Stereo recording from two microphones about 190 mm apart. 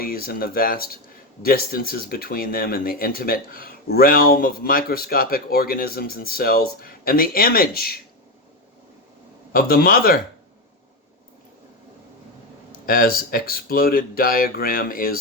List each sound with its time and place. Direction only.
0.0 s speech: 50° left (ahead or behind)
9.5 s speech: 50° left (ahead or behind)
12.7 s speech: 50° left (ahead or behind)